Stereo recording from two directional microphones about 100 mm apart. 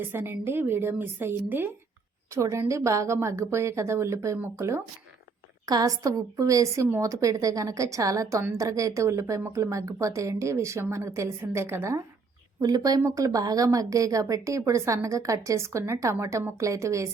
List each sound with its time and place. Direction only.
0.1 s a woman's voice: 20° right (ahead or behind)
12.5 s a woman's voice: 40° right (ahead or behind)